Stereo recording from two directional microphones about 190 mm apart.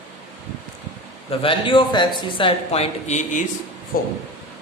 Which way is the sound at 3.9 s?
50° left (ahead or behind).